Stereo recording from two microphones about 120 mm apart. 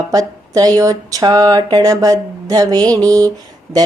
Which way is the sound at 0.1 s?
30° right (ahead or behind).